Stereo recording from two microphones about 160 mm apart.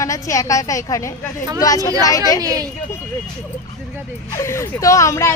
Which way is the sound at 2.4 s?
20° right (ahead or behind).